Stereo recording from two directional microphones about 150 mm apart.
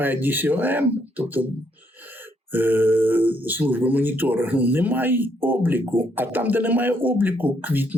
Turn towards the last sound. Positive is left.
turn(degrees=-10)  # may be behind; listen again after turning